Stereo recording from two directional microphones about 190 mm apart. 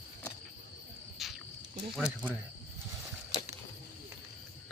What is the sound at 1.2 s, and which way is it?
Cricket, centre (ahead or behind).